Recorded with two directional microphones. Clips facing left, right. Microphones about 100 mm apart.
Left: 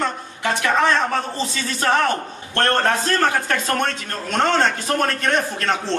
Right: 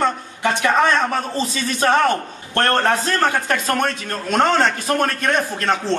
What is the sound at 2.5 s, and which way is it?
A man's voice, 20° right (ahead or behind).